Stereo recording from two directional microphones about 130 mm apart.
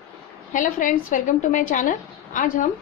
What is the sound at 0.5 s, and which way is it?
A woman's voice, 90° left.